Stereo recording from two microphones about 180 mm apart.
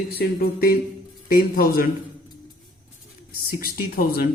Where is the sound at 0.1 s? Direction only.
60° left (ahead or behind).